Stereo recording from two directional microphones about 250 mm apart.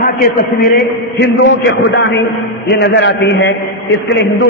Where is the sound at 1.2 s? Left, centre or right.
Left.